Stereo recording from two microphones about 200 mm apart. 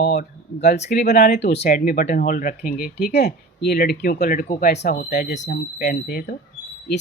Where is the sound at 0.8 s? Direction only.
40° left (ahead or behind).